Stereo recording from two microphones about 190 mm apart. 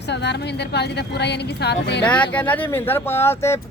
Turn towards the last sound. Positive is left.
turn(degrees=15)  # may be behind; listen again after turning